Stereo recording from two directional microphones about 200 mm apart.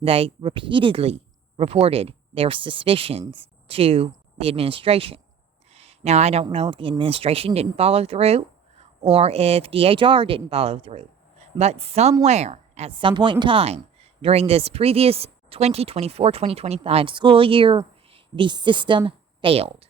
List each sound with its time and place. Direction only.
0.0 s speech: 30° right (ahead or behind)
5.7 s a sound: 30° right (ahead or behind)
6.4 s speech: 30° right (ahead or behind)